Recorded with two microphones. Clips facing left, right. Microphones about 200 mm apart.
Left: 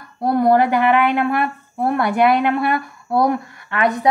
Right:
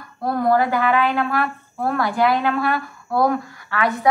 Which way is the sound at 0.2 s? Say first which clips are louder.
Left 4 dB; 20° left (ahead or behind).